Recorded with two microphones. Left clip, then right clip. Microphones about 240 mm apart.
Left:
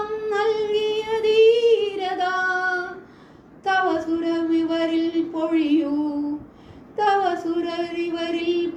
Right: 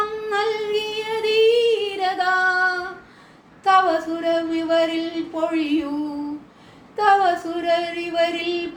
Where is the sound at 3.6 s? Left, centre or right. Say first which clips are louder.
Right 4 dB; centre.